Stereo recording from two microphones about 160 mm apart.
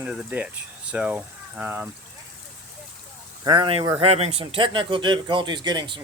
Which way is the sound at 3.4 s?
30° right (ahead or behind).